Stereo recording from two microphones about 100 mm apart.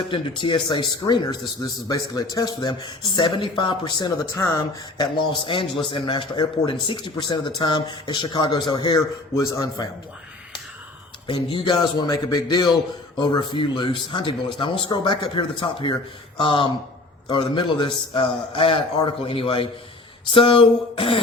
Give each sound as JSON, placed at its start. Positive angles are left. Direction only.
{"t": 0.1, "sound": "a man's voice", "side_deg": 55}
{"t": 4.4, "sound": "speech", "side_deg": 30}
{"t": 4.9, "sound": "a man's voice", "side_deg": 55}
{"t": 9.3, "sound": "a man's voice", "side_deg": 35}
{"t": 11.3, "sound": "a man's voice", "side_deg": 60}